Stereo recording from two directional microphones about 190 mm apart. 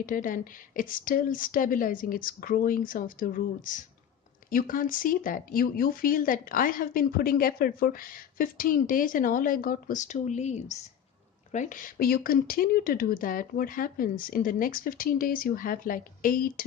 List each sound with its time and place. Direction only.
0.0 s speech: 45° left (ahead or behind)